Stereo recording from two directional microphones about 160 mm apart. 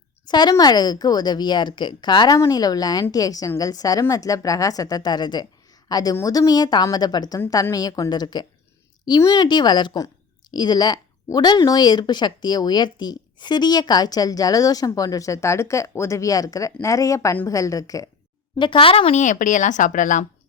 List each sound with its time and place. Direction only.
0.3 s speech: 25° left (ahead or behind)
18.6 s speech: 35° left (ahead or behind); by 20.2 s 55° left (ahead or behind)